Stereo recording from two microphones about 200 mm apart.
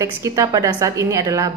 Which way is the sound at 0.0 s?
15° right (ahead or behind).